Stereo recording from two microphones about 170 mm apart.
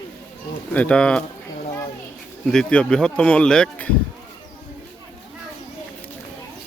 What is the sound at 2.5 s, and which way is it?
A man's voice, 5° left (ahead or behind).